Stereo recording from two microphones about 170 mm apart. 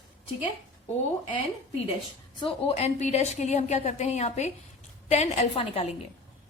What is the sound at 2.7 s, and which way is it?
A woman's voice, 40° left (ahead or behind).